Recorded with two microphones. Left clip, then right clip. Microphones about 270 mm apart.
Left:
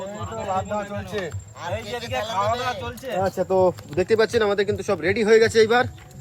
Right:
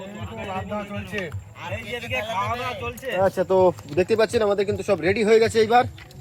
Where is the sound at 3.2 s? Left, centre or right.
Right.